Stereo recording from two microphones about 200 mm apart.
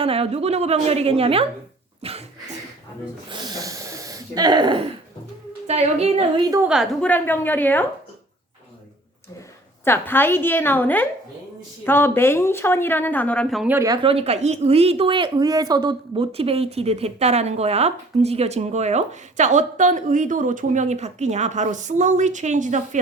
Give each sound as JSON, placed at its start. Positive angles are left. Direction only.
{"t": 0.0, "sound": "a woman's voice", "side_deg": -30}
{"t": 2.0, "sound": "cough", "side_deg": -30}
{"t": 3.2, "sound": "snort", "side_deg": -20}
{"t": 5.6, "sound": "a woman's voice", "side_deg": -30}
{"t": 6.7, "sound": "a woman's voice", "side_deg": 0}
{"t": 7.1, "sound": "a woman's voice", "side_deg": 10}
{"t": 9.8, "sound": "a woman's voice", "side_deg": 10}